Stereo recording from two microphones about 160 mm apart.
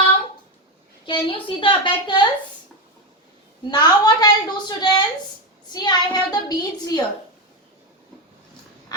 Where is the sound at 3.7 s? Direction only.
25° left (ahead or behind).